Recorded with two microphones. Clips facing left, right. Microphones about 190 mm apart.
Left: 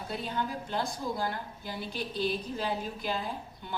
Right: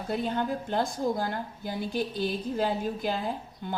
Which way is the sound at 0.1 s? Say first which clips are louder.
Right 6 dB; 50° right (ahead or behind).